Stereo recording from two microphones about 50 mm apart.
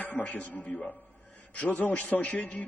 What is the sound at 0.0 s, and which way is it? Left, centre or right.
Music, left.